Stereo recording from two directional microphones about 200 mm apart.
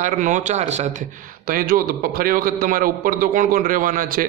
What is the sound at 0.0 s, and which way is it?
A man's voice, 40° right (ahead or behind).